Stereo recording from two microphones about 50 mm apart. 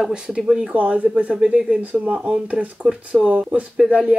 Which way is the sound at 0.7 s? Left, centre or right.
Right.